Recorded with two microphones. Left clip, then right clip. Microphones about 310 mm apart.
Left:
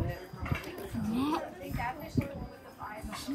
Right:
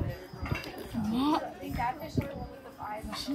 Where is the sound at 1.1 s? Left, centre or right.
Right.